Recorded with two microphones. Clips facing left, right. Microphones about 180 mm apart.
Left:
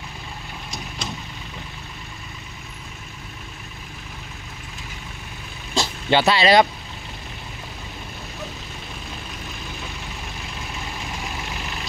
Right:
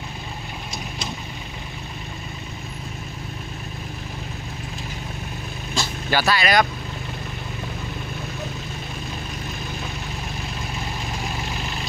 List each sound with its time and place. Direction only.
5.8 s vehicle: 25° left (ahead or behind)